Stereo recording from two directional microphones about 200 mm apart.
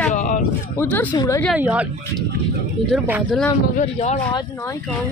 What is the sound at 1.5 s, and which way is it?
Speech, 5° right (ahead or behind).